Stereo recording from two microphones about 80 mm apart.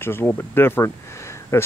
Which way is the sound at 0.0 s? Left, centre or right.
Left.